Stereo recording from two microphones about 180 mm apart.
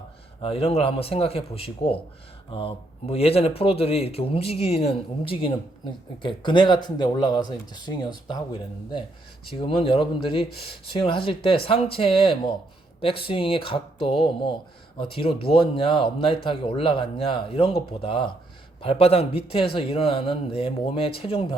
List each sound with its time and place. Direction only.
0.4 s a man's voice: 35° left (ahead or behind)